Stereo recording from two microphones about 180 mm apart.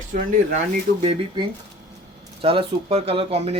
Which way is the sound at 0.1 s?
45° right (ahead or behind).